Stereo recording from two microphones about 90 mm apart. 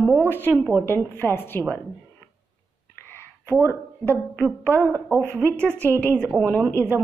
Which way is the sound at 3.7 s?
20° left (ahead or behind).